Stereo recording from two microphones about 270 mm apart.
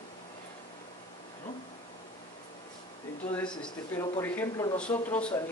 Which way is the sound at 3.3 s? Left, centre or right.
Centre.